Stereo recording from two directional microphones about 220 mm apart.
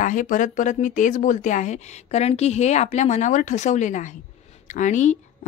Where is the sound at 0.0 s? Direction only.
35° left (ahead or behind).